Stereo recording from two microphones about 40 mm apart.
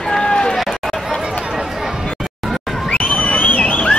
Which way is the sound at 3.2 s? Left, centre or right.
Left.